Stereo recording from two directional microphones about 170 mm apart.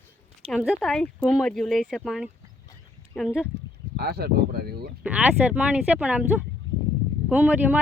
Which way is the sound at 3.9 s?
70° right (ahead or behind).